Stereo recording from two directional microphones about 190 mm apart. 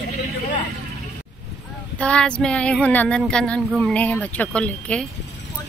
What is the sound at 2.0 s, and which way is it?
Speech, 5° left (ahead or behind).